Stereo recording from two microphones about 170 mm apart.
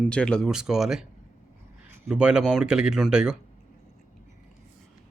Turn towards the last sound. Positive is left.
turn(degrees=-5)  # may be behind; listen again after turning